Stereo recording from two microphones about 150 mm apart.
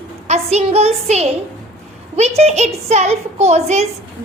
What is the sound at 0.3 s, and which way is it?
A child's voice, 45° right (ahead or behind).